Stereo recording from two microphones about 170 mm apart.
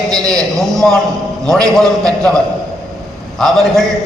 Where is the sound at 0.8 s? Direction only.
5° left (ahead or behind).